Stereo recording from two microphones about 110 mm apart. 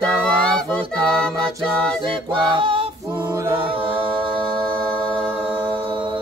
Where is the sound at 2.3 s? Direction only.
50° right (ahead or behind).